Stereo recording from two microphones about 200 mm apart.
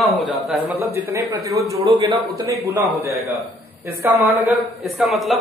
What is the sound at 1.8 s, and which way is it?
Speech, 25° right (ahead or behind).